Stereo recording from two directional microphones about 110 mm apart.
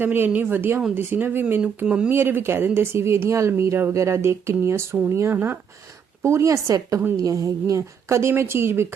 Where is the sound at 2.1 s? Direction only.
20° right (ahead or behind).